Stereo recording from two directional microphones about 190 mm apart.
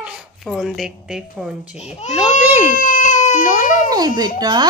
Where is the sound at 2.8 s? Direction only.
45° left (ahead or behind).